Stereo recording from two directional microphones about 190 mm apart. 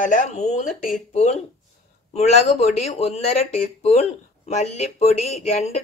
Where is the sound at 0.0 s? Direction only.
40° left (ahead or behind).